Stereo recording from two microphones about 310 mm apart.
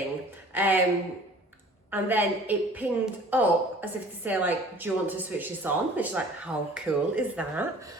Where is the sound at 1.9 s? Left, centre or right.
Centre.